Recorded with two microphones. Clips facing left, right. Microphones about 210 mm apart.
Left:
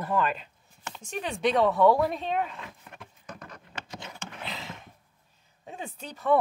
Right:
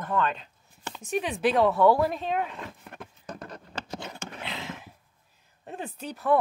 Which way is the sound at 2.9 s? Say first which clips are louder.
Right 4 dB; 35° right (ahead or behind).